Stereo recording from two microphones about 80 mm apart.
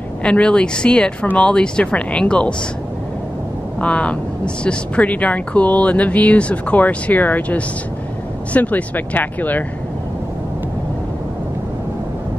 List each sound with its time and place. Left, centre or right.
0.2 s speech: centre
3.8 s speech: centre